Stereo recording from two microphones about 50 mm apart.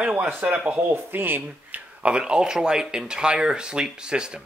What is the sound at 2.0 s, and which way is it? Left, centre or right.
Speech, right.